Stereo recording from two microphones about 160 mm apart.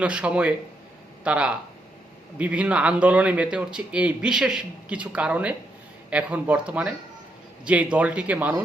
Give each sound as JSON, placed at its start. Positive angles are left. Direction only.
{"t": 0.0, "sound": "a man's voice", "side_deg": -10}